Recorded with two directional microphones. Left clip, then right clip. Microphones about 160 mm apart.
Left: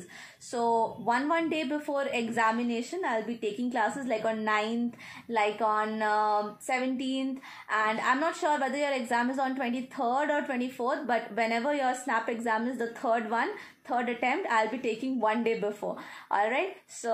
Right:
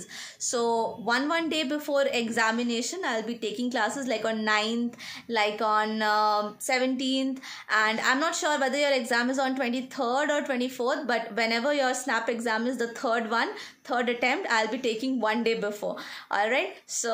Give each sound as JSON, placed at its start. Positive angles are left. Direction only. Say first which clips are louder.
{"t": 0.5, "sound": "a woman's voice", "louder": "right 1 dB", "side_deg": -25}